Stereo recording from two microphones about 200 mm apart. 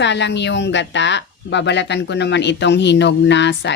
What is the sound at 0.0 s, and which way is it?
Speech, 60° left (ahead or behind).